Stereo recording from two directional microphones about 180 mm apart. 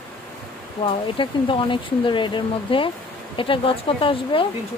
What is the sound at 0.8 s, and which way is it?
Speech, 30° left (ahead or behind).